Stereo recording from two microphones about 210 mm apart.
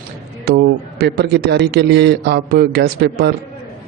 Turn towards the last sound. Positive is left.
turn(degrees=-50)  # may be behind; listen again after turning